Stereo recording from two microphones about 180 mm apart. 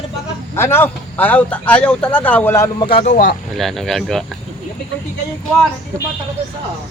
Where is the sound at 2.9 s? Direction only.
45° left (ahead or behind).